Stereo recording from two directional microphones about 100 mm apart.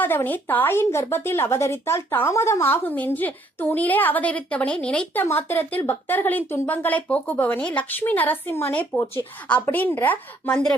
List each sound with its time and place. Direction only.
0.0 s a woman's voice: 20° left (ahead or behind)
5.2 s a woman's voice: 20° left (ahead or behind)